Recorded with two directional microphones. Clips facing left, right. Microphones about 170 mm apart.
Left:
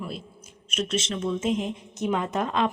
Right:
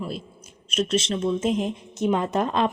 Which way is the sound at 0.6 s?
35° right (ahead or behind).